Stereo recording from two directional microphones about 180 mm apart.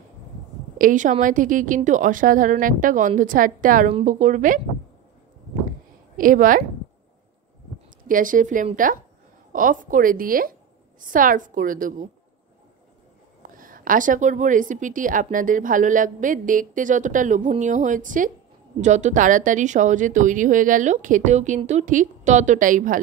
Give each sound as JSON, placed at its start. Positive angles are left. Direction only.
{"t": 0.7, "sound": "a woman's voice", "side_deg": -45}
{"t": 6.1, "sound": "a woman's voice", "side_deg": -50}
{"t": 8.1, "sound": "a woman's voice", "side_deg": -50}
{"t": 13.4, "sound": "a woman's voice", "side_deg": -50}